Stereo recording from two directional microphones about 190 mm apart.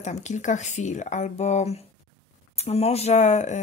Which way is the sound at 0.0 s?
40° left (ahead or behind).